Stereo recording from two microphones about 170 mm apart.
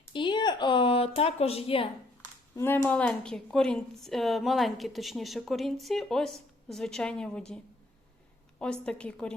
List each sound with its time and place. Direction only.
0.1 s speech: 30° left (ahead or behind)
2.6 s a woman's voice: 10° left (ahead or behind)